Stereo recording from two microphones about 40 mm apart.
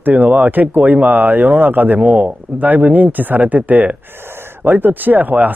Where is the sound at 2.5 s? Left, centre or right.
Right.